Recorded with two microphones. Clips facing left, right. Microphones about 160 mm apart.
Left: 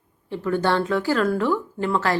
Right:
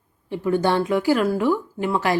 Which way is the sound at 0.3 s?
15° right (ahead or behind).